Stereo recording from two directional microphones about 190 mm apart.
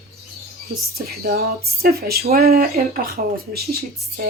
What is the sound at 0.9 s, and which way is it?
Speech, 55° right (ahead or behind).